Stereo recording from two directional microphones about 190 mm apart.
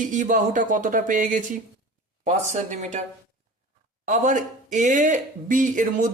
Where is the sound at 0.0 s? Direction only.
40° right (ahead or behind).